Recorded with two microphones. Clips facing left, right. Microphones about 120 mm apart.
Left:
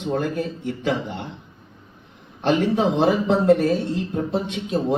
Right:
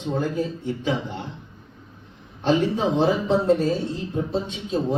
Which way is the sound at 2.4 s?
70° left (ahead or behind).